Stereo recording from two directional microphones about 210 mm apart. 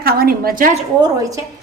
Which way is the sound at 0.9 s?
15° right (ahead or behind).